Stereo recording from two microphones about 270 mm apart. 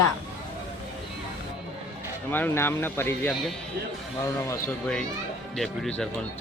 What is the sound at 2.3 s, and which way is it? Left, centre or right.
Speech, centre.